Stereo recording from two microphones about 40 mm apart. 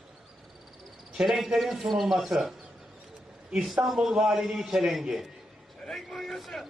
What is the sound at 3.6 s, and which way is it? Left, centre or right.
A man's voice, centre.